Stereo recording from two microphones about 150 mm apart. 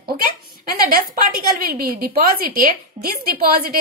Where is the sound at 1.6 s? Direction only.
80° right.